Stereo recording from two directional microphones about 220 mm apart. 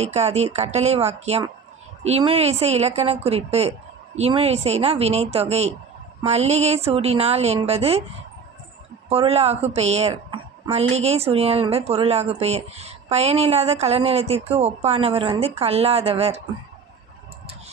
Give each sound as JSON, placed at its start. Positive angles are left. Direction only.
{"t": 0.0, "sound": "a woman's voice", "side_deg": -30}
{"t": 9.1, "sound": "a woman's voice", "side_deg": -25}